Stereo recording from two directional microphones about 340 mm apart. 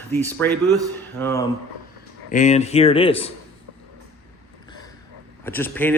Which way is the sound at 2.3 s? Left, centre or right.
Left.